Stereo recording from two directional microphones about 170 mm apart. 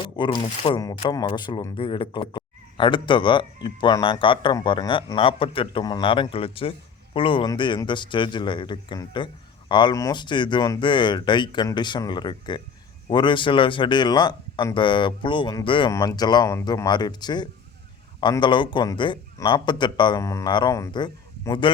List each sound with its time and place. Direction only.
0.2 s speech: 30° left (ahead or behind)